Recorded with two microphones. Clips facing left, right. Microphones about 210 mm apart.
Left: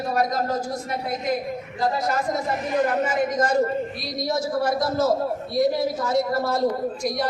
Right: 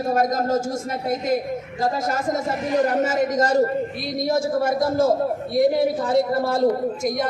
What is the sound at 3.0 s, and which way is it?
Speech, 40° right (ahead or behind).